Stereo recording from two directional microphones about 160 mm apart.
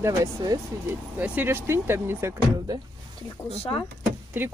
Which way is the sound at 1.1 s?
10° right (ahead or behind).